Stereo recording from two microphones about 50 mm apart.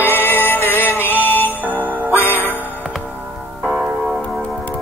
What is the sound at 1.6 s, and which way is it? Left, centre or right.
Music, right.